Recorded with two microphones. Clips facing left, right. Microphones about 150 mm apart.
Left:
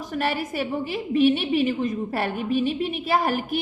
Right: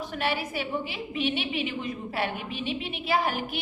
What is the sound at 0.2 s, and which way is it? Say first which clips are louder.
A woman's voice: left 4 dB; 45° left (ahead or behind).